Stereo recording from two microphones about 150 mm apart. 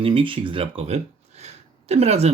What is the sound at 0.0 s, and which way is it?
Speech, 35° right (ahead or behind).